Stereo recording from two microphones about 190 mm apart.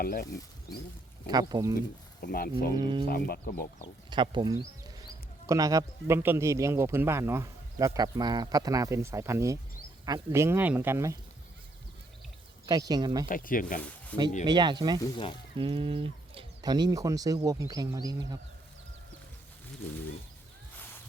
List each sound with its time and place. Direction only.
0.0 s speech: 50° left (ahead or behind)
1.3 s speech: 20° right (ahead or behind)
2.2 s speech: 50° left (ahead or behind)
2.7 s speech: 25° right (ahead or behind)
3.1 s speech: 50° left (ahead or behind)
4.1 s speech: 25° right (ahead or behind)
12.6 s speech: 20° right (ahead or behind)
13.2 s speech: 45° left (ahead or behind)
14.4 s speech: 25° right (ahead or behind)
15.0 s speech: 25° left (ahead or behind)
15.5 s speech: 30° right (ahead or behind)